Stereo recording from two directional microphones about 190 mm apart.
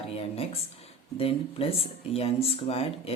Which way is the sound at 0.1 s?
30° left (ahead or behind).